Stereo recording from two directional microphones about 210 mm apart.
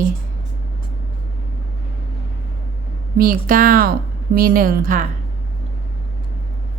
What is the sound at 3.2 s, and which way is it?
Speech, 40° right (ahead or behind).